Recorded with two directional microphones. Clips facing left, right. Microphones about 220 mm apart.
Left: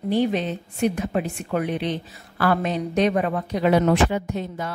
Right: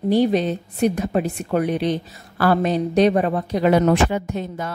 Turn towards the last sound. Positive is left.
turn(degrees=-45)  # may be behind; listen again after turning